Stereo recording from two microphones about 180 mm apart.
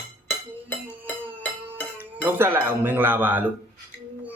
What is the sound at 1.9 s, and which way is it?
Speech, 10° right (ahead or behind).